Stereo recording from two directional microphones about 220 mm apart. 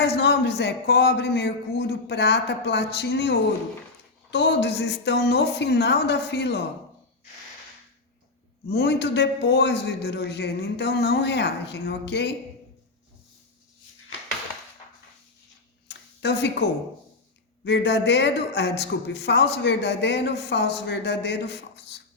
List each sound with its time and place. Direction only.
0.0 s speech: 50° left (ahead or behind)
8.6 s speech: 45° left (ahead or behind)
15.9 s a sound: 50° left (ahead or behind)
17.6 s speech: 50° left (ahead or behind)